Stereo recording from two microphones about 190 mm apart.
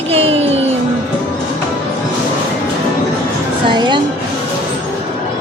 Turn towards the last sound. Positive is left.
turn(degrees=-25)  # may be behind; listen again after turning